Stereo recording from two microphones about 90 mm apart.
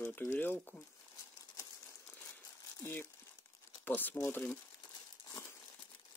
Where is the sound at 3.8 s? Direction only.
20° left (ahead or behind).